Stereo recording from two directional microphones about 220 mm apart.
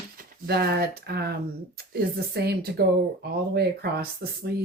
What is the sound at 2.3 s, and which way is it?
Speech, 45° right (ahead or behind).